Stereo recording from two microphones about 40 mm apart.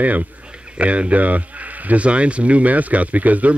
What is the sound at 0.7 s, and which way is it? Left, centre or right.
Speech, right.